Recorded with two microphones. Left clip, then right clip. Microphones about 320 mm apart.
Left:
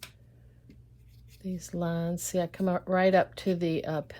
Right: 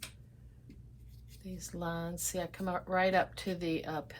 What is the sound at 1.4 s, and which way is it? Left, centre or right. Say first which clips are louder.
Speech: left 6 dB; left.